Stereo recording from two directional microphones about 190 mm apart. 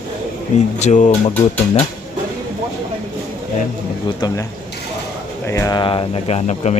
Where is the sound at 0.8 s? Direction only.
40° left (ahead or behind).